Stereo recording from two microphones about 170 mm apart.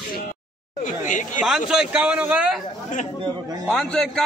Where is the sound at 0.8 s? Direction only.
50° left (ahead or behind).